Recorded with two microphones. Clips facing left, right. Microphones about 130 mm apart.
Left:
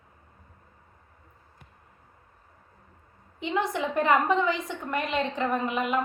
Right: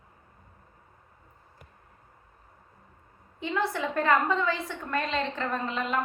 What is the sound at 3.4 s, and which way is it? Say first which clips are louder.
A woman's voice: left 1 dB; 20° left (ahead or behind).